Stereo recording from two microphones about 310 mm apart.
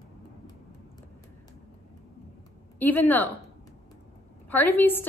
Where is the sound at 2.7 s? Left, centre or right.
Centre.